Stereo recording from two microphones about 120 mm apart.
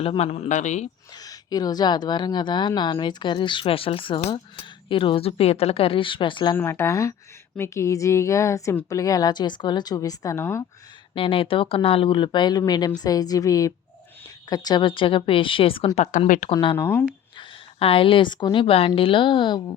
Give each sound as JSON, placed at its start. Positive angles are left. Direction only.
{"t": 0.0, "sound": "speech", "side_deg": 60}
{"t": 1.1, "sound": "a woman's voice", "side_deg": 30}
{"t": 6.6, "sound": "a woman's voice", "side_deg": 20}
{"t": 11.1, "sound": "a woman's voice", "side_deg": 45}
{"t": 16.0, "sound": "speech", "side_deg": 90}
{"t": 16.5, "sound": "speech", "side_deg": 45}
{"t": 16.7, "sound": "speech", "side_deg": 20}
{"t": 17.3, "sound": "a woman's voice", "side_deg": 50}